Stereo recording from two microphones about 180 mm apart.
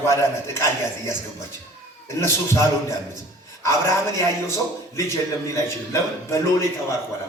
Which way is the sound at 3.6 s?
15° left (ahead or behind).